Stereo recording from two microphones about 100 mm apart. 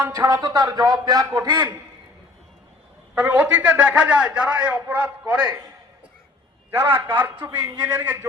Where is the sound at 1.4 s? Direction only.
50° right (ahead or behind).